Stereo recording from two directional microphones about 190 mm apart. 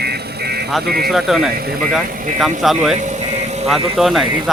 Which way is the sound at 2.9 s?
40° right (ahead or behind).